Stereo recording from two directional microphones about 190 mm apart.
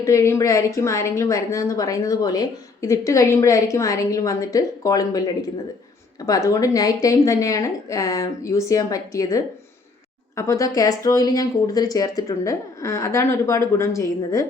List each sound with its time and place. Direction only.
0.0 s a woman's voice: 15° left (ahead or behind)